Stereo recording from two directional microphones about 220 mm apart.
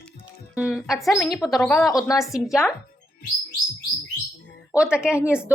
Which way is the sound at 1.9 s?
15° left (ahead or behind).